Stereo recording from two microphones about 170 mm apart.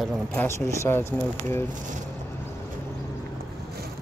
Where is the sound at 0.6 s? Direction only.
15° left (ahead or behind).